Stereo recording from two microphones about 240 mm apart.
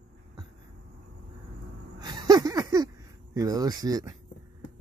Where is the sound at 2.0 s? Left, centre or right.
Centre.